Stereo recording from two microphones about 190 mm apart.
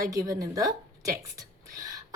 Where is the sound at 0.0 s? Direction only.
20° right (ahead or behind).